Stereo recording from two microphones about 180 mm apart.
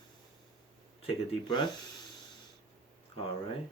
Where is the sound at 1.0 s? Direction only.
25° left (ahead or behind).